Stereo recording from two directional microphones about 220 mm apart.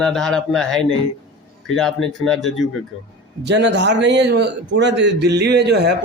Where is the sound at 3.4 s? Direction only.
50° right (ahead or behind).